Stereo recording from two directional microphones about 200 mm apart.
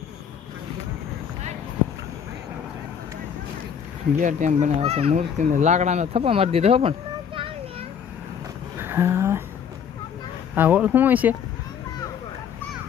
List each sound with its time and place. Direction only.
4.2 s a child's voice: 40° right (ahead or behind)
8.8 s a sound: 10° right (ahead or behind)
10.5 s speech: 10° right (ahead or behind)